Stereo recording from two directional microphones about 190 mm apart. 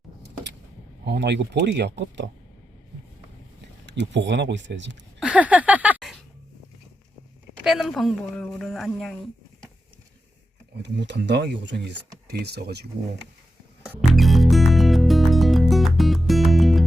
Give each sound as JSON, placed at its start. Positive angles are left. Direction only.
{"t": 1.0, "sound": "speech", "side_deg": -65}
{"t": 3.8, "sound": "speech", "side_deg": -70}
{"t": 5.2, "sound": "a sound", "side_deg": -5}
{"t": 7.6, "sound": "speech", "side_deg": 0}
{"t": 10.8, "sound": "speech", "side_deg": -65}
{"t": 14.1, "sound": "music", "side_deg": 0}